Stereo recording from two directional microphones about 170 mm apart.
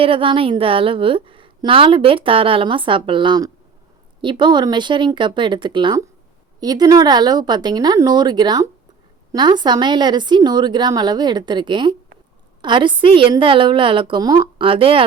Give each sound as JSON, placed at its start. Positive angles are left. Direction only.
{"t": 0.0, "sound": "a woman's voice", "side_deg": -30}